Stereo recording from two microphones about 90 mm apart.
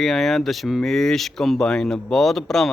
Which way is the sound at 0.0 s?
Centre (ahead or behind).